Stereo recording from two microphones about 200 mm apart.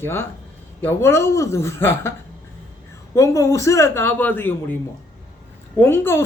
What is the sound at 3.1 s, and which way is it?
Speech, 15° left (ahead or behind).